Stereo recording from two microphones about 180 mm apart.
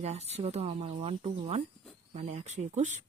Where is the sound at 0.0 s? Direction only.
35° right (ahead or behind).